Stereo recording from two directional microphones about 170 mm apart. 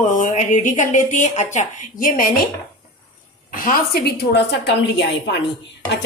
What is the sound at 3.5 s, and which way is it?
Speech, 60° left (ahead or behind).